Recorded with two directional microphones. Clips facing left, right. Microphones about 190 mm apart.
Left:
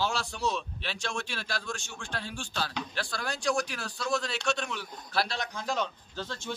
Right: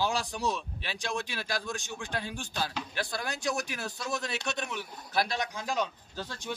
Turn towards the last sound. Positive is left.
turn(degrees=-10)  # may be behind; listen again after turning